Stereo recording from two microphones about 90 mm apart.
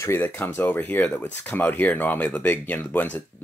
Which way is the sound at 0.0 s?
30° left (ahead or behind).